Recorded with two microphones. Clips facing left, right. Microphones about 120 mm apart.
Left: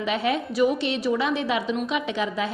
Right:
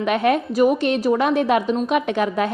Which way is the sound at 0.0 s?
55° right (ahead or behind).